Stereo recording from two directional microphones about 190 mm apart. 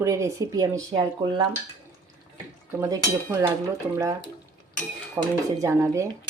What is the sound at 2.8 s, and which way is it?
Speech, 15° right (ahead or behind).